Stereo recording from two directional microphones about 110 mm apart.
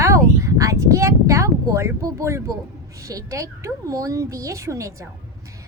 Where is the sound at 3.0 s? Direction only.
30° right (ahead or behind).